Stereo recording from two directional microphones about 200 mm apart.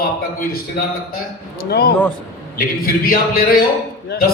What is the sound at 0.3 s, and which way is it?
Speech, 45° left (ahead or behind).